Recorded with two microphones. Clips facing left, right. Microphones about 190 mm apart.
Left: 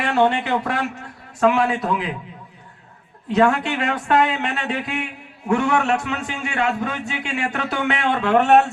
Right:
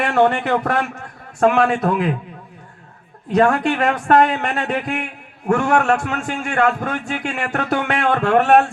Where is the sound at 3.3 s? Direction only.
45° right (ahead or behind).